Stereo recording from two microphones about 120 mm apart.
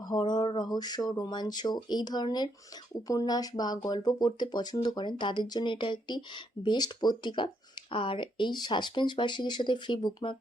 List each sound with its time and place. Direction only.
0.0 s speech: 35° left (ahead or behind)